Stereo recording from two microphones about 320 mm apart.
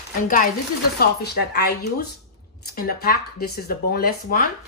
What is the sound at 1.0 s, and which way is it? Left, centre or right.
Speech, left.